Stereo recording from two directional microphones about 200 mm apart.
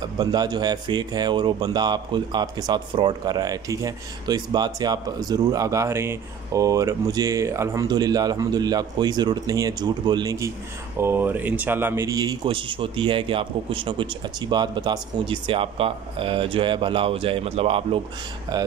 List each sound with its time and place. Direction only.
0.2 s speech: 20° right (ahead or behind)